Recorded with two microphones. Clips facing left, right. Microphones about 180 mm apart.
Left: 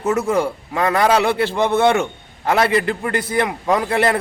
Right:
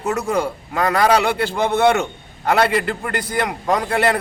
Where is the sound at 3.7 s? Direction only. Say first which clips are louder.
Left 1 dB; 25° left (ahead or behind).